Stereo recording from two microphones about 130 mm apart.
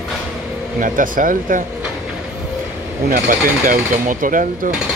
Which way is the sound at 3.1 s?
90° right.